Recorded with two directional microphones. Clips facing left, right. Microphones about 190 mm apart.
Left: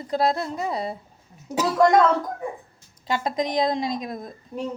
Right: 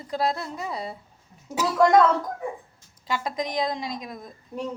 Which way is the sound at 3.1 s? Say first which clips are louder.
Left 4 dB; 25° left (ahead or behind).